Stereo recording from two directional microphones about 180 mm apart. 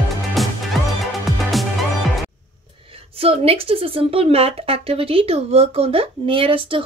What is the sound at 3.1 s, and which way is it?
Speech, 35° right (ahead or behind).